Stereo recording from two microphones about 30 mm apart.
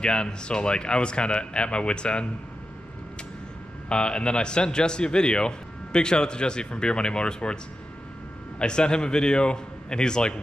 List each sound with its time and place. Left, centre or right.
0.0 s speech: left
3.9 s a man's voice: left
8.5 s a man's voice: left